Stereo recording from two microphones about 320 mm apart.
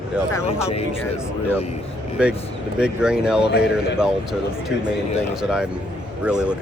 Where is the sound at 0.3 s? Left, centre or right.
Centre.